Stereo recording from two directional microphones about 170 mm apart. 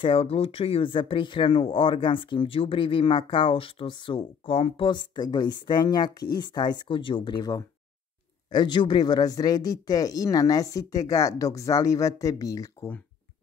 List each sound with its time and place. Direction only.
0.0 s speech: 35° left (ahead or behind); by 13.0 s 15° left (ahead or behind)